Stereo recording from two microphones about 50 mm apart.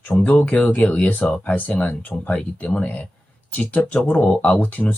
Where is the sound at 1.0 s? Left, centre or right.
Left.